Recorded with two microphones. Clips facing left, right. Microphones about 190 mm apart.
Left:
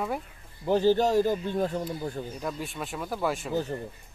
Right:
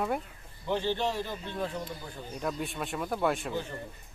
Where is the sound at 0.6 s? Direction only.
40° left (ahead or behind).